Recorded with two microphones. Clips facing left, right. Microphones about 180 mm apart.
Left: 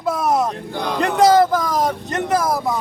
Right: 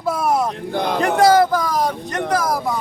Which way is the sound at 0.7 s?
50° right (ahead or behind).